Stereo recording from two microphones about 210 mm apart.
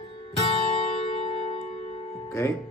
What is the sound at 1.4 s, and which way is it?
Music, 30° left (ahead or behind).